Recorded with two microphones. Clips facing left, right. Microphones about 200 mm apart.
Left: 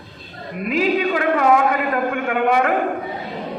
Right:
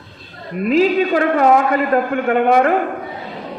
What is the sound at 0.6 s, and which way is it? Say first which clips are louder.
A man's voice: right 5 dB; 40° right (ahead or behind).